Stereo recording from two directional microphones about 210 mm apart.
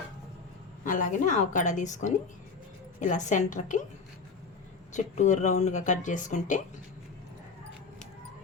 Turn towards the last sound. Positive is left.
turn(degrees=35)  # may be behind; listen again after turning